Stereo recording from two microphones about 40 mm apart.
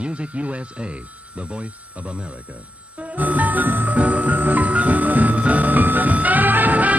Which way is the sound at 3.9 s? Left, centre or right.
Right.